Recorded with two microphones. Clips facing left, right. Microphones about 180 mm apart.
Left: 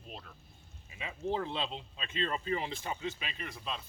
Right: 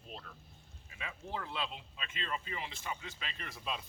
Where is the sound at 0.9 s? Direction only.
20° left (ahead or behind).